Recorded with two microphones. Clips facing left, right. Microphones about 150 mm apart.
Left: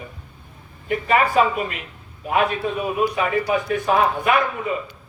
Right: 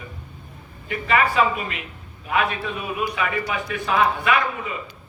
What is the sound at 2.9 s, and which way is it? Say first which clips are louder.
A man's voice: left 3 dB; 35° left (ahead or behind).